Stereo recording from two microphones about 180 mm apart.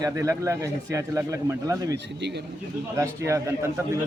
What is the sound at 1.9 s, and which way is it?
Speech, 70° right (ahead or behind).